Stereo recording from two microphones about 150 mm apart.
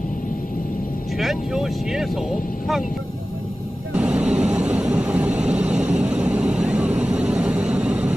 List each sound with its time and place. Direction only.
1.1 s speech: centre (ahead or behind)
3.9 s vehicle: 10° right (ahead or behind)